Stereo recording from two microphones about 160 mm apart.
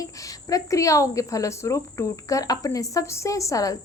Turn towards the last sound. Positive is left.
turn(degrees=20)  # may be behind; listen again after turning